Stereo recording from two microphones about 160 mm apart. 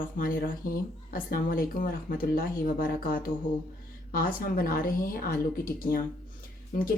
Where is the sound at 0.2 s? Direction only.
60° left (ahead or behind).